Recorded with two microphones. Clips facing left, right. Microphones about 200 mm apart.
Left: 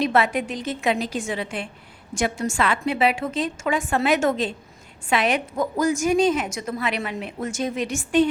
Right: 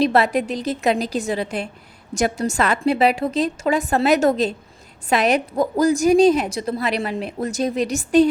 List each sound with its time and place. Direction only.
0.0 s a woman's voice: 35° right (ahead or behind)